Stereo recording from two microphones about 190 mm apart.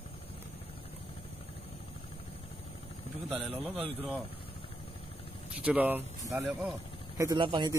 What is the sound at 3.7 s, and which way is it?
Speech, 30° right (ahead or behind).